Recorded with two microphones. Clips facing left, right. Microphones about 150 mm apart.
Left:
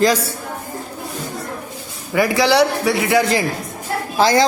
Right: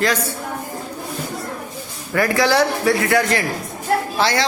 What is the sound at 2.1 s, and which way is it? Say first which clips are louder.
A man's voice: left 2 dB; 15° left (ahead or behind).